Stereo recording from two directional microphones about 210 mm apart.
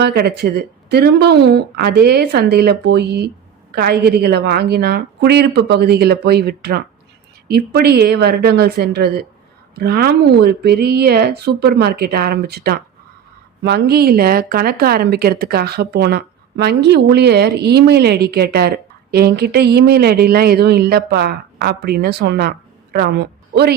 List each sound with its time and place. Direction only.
0.0 s speech: 50° right (ahead or behind)